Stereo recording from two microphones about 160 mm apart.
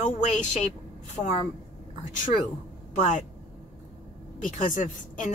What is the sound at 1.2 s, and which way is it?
Speech, 5° left (ahead or behind).